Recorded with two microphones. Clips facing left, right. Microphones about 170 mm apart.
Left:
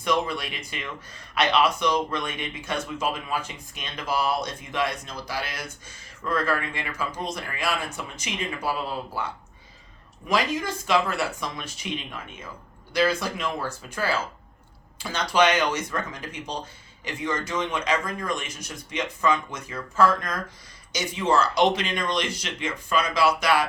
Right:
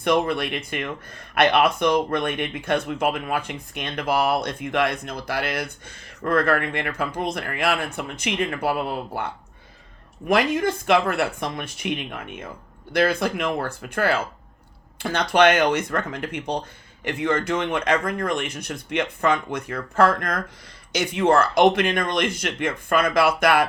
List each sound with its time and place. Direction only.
0.0 s speech: 60° right (ahead or behind)